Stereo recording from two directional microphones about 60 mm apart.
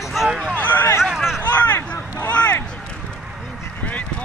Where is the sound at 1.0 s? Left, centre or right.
Centre.